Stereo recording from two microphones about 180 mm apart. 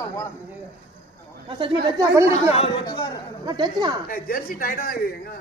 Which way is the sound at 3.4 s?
25° right (ahead or behind).